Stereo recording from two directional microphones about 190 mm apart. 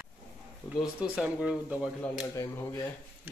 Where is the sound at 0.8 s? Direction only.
5° right (ahead or behind).